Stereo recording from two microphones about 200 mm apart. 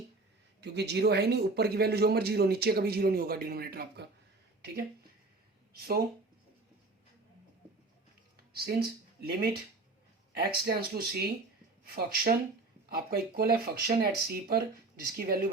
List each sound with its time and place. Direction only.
0.6 s speech: 55° right (ahead or behind)
8.5 s speech: 50° right (ahead or behind)
10.6 s speech: 50° right (ahead or behind)